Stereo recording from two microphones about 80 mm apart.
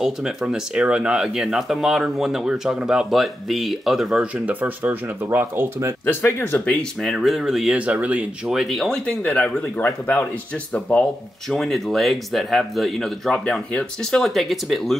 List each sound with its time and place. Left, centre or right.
0.0 s speech: centre
4.5 s speech: right
6.0 s speech: left
6.6 s speech: centre
7.0 s speech: centre
7.7 s speech: centre
8.5 s speech: centre
11.4 s speech: centre